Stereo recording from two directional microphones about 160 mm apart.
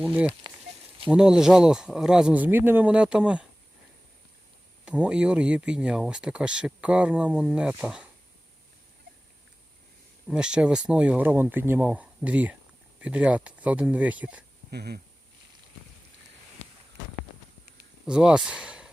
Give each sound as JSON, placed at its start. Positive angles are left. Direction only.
{"t": 0.0, "sound": "speech", "side_deg": -10}
{"t": 4.9, "sound": "speech", "side_deg": -5}
{"t": 10.2, "sound": "speech", "side_deg": -5}
{"t": 14.7, "sound": "speech", "side_deg": -90}
{"t": 18.0, "sound": "speech", "side_deg": -5}